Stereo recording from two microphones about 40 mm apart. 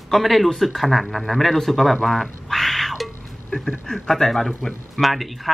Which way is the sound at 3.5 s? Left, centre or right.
Left.